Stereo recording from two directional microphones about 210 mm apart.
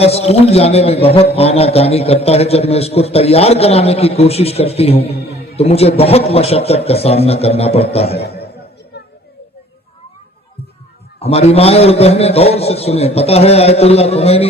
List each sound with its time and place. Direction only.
0.0 s a man's voice: 30° left (ahead or behind)
11.2 s a man's voice: 30° left (ahead or behind)